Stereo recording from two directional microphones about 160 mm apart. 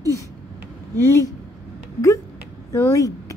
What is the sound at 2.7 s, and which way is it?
Speech, 20° left (ahead or behind).